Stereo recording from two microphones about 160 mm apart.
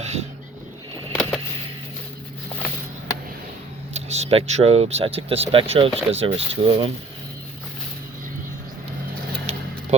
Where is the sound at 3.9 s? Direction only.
45° right (ahead or behind).